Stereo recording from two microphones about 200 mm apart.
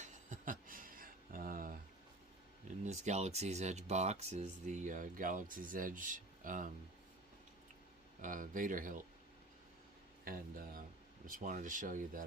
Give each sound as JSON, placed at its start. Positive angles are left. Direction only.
{"t": 0.0, "sound": "a sound", "side_deg": -40}
{"t": 2.8, "sound": "speech", "side_deg": -35}
{"t": 8.2, "sound": "speech", "side_deg": -40}
{"t": 10.2, "sound": "speech", "side_deg": -45}